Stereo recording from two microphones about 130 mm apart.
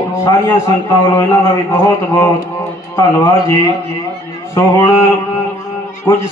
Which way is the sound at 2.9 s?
25° left (ahead or behind).